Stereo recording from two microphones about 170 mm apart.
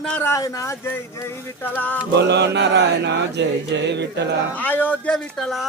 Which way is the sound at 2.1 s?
90° right.